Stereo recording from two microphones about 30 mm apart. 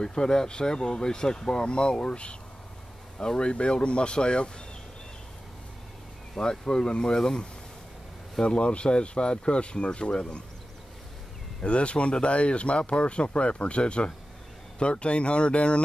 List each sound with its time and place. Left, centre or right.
0.0 s speech: left
6.3 s speech: left
8.4 s speech: left
11.6 s speech: left